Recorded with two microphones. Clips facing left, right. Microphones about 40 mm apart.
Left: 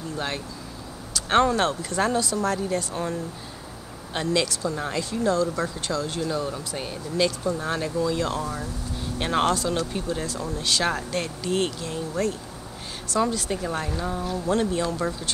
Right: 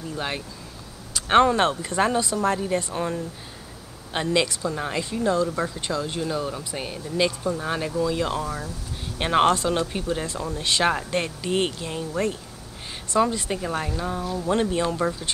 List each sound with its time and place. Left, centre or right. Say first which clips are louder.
1.1 s speech: right 3 dB; right
13.1 s speech: right 2 dB; right
14.5 s speech: right 1 dB; right